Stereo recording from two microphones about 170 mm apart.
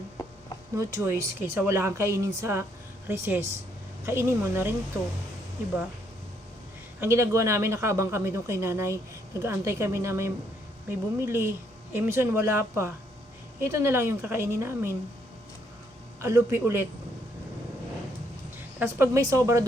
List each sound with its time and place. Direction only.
0.8 s speech: 15° right (ahead or behind)
7.0 s speech: 15° right (ahead or behind)
16.2 s speech: 15° right (ahead or behind)
18.5 s speech: 15° right (ahead or behind)